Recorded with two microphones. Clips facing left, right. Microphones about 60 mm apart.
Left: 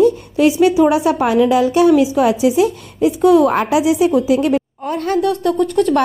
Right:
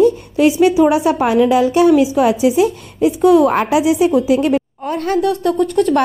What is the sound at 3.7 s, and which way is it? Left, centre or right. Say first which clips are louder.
A woman's voice: even; right.